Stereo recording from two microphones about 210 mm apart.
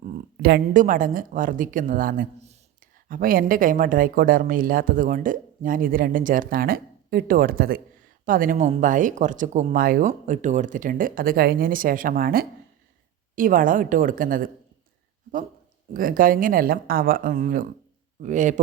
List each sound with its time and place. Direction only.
0.4 s speech: 45° right (ahead or behind)
15.9 s speech: 40° right (ahead or behind)